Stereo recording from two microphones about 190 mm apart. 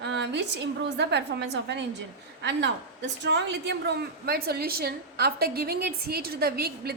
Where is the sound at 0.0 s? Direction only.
65° right (ahead or behind).